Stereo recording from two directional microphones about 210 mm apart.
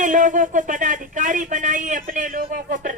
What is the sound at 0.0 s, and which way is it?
Speech, 40° right (ahead or behind).